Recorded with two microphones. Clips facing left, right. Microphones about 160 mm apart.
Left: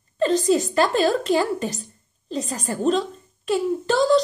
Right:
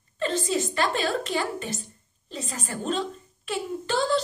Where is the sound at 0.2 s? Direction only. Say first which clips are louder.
Left 7 dB; 35° left (ahead or behind).